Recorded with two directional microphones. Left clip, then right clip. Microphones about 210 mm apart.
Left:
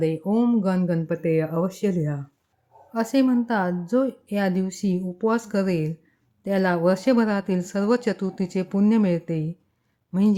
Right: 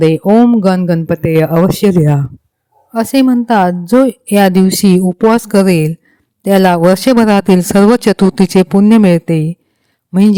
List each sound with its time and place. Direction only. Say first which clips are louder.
0.0 s speech: right 15 dB; 50° right (ahead or behind)